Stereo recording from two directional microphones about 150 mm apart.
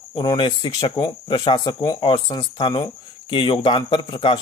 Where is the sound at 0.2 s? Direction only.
30° left (ahead or behind).